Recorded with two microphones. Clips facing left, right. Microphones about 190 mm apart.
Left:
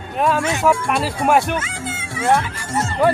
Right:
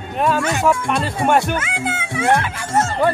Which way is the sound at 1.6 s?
60° right (ahead or behind).